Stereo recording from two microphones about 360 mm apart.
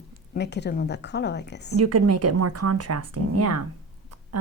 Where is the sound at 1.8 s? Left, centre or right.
Right.